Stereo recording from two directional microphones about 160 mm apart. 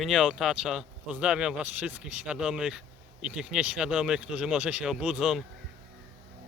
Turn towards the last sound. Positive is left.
turn(degrees=-5)  # may be behind; listen again after turning